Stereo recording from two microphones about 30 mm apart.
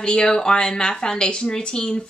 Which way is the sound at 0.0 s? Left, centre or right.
Left.